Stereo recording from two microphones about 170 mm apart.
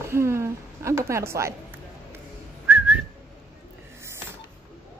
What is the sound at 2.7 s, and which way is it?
Whistling, 10° right (ahead or behind).